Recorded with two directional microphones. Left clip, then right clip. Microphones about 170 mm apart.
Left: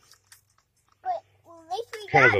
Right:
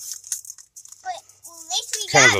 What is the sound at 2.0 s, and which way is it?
Speech, 35° right (ahead or behind).